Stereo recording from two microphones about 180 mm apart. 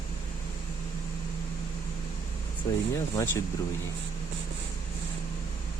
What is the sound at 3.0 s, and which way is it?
Speech, 15° left (ahead or behind).